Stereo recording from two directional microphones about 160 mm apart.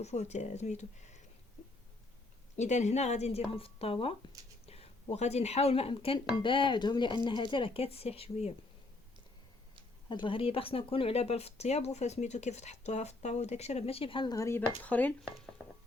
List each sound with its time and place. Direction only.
0.0 s speech: 45° left (ahead or behind)
2.6 s speech: 45° left (ahead or behind)
10.1 s speech: 30° left (ahead or behind)
14.3 s speech: 20° left (ahead or behind)